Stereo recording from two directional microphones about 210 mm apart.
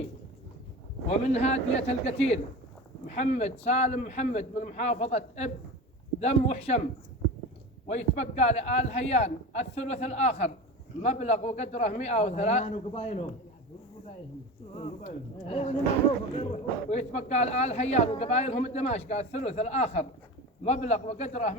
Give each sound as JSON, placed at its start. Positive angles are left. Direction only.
{"t": 1.0, "sound": "speech", "side_deg": 30}
{"t": 7.9, "sound": "speech", "side_deg": 30}
{"t": 14.8, "sound": "speech", "side_deg": 30}